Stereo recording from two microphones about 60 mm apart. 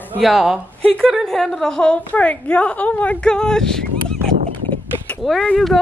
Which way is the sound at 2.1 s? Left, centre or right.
Left.